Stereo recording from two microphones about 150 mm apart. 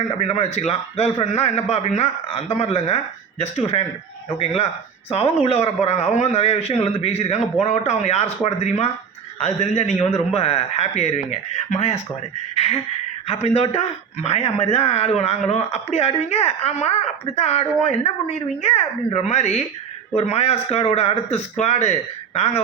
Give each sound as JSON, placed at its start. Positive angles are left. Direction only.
{"t": 0.2, "sound": "speech", "side_deg": 45}